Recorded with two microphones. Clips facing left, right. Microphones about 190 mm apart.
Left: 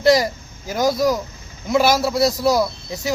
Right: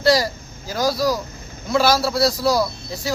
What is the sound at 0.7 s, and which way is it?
Speech, 20° left (ahead or behind).